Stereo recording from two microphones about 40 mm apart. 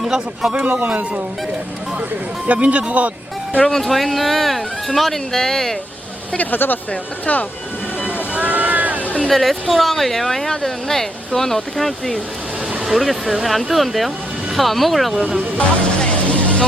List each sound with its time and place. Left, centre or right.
0.0 s speech: centre
0.5 s speech: right
2.5 s speech: right
3.6 s speech: centre
6.3 s speech: left
8.0 s vehicle: right
9.0 s a sound: left
9.3 s speech: centre
15.2 s speech: centre
16.0 s music: left